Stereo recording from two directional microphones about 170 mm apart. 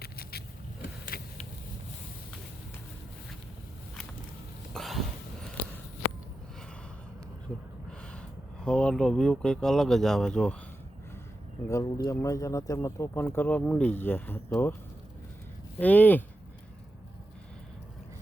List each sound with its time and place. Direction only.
0.0 s vehicle: 65° left (ahead or behind)
4.7 s a sound: centre (ahead or behind)
8.6 s speech: 5° left (ahead or behind)
11.7 s speech: 20° left (ahead or behind)
15.8 s speech: 10° left (ahead or behind)